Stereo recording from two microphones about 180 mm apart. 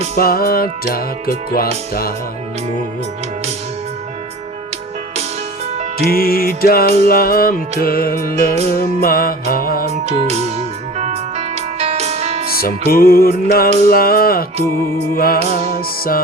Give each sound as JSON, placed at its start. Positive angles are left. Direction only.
{"t": 0.2, "sound": "music", "side_deg": 55}
{"t": 6.0, "sound": "music", "side_deg": 55}
{"t": 10.1, "sound": "music", "side_deg": -35}
{"t": 12.5, "sound": "music", "side_deg": 55}